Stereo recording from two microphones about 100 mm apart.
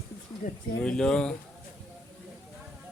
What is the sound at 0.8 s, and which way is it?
Speech, 10° left (ahead or behind).